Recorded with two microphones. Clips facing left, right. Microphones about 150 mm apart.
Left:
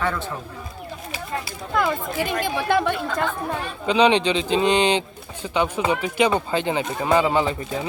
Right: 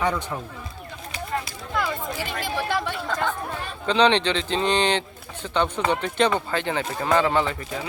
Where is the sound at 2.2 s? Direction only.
55° left (ahead or behind).